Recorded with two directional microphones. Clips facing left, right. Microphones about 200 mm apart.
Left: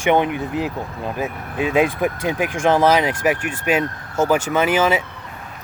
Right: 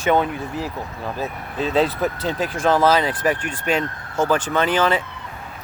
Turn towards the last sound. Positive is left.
turn(degrees=10)  # may be behind; listen again after turning